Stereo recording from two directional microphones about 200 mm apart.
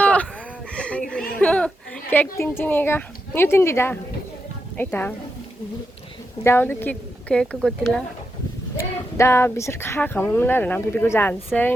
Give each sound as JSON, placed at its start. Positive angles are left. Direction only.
{"t": 0.0, "sound": "a sound", "side_deg": 5}
{"t": 4.8, "sound": "speech", "side_deg": 10}
{"t": 6.4, "sound": "speech", "side_deg": 10}
{"t": 8.8, "sound": "speech", "side_deg": 15}